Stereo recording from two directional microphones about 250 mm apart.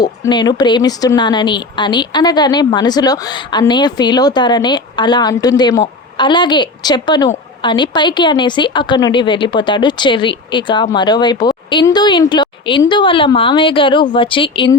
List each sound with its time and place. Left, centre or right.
0.0 s a woman's voice: centre